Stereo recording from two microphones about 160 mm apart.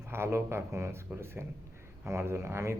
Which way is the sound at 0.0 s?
15° right (ahead or behind).